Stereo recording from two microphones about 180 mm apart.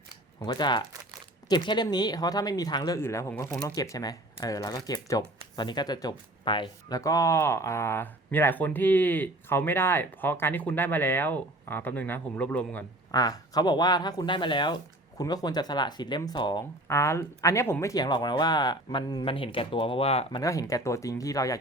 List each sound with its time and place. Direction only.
0.3 s speech: 25° left (ahead or behind); by 12.8 s 10° left (ahead or behind)
13.1 s speech: 20° left (ahead or behind)
20.4 s speech: 20° left (ahead or behind)